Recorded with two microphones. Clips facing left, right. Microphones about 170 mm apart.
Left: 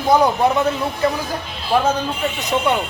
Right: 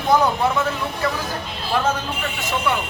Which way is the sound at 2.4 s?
20° left (ahead or behind).